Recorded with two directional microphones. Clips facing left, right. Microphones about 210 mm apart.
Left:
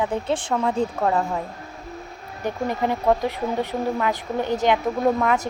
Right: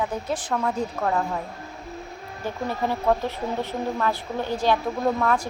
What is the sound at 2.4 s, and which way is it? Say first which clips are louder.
A woman's voice: left 3 dB; 15° left (ahead or behind).